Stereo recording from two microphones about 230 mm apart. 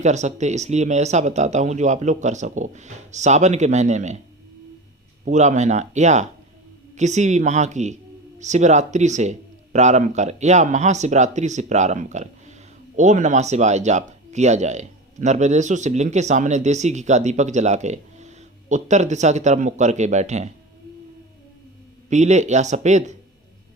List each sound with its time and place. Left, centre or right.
0.0 s speech: right
5.2 s speech: right
22.1 s speech: right